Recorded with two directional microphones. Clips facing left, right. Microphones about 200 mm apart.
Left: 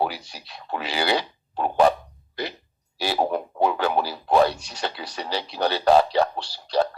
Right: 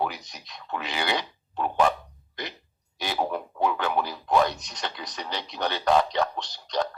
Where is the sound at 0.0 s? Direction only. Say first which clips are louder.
Left 3 dB; 30° left (ahead or behind).